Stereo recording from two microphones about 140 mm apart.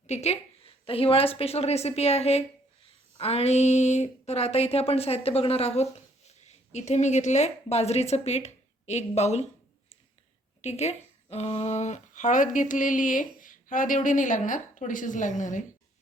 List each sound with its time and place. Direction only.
0.1 s speech: 50° left (ahead or behind)
10.6 s speech: 55° left (ahead or behind)